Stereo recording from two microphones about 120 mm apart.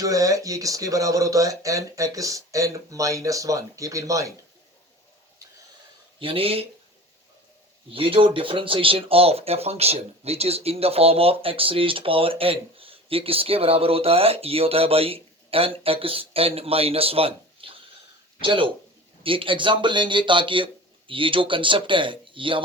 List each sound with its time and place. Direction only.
0.0 s speech: 30° right (ahead or behind)
6.1 s speech: 50° right (ahead or behind)
7.9 s speech: 50° right (ahead or behind)